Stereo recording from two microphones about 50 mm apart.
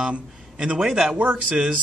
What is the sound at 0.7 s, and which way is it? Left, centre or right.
Speech, centre.